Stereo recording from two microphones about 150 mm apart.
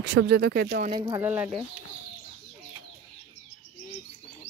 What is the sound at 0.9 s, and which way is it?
Speech, 30° right (ahead or behind).